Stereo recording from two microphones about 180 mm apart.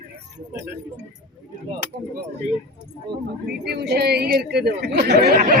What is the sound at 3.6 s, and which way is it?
Speech, 65° right (ahead or behind).